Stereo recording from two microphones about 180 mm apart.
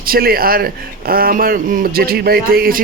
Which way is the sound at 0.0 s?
55° right (ahead or behind).